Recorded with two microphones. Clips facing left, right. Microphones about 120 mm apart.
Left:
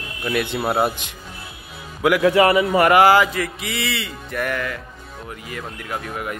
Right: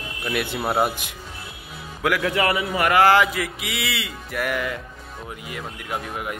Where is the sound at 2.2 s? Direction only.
30° left (ahead or behind).